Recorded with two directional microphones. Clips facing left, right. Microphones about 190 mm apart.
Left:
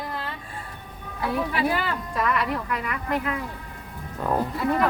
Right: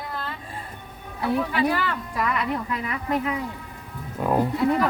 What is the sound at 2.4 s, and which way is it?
Speech, 20° right (ahead or behind).